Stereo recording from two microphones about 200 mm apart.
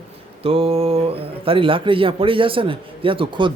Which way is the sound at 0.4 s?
30° right (ahead or behind).